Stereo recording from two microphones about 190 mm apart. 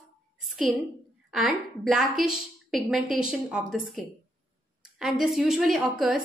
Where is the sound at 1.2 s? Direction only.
Centre (ahead or behind).